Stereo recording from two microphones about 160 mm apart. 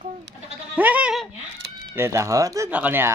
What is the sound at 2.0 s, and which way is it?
Speech, 20° right (ahead or behind).